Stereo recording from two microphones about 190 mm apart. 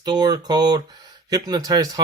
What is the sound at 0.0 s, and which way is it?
Speech, 20° right (ahead or behind).